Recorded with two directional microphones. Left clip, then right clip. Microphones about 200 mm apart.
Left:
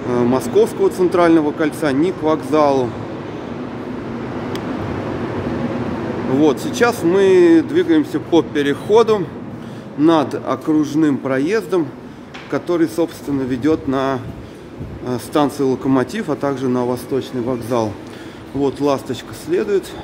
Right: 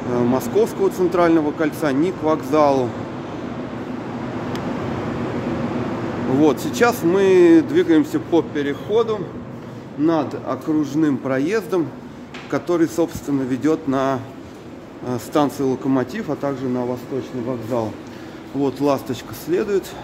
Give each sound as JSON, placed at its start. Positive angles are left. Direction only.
{"t": 0.1, "sound": "speech", "side_deg": 5}
{"t": 6.4, "sound": "speech", "side_deg": -5}
{"t": 8.3, "sound": "speech", "side_deg": 5}
{"t": 8.9, "sound": "a man's voice", "side_deg": 25}
{"t": 10.0, "sound": "speech", "side_deg": 10}
{"t": 18.6, "sound": "speech", "side_deg": 0}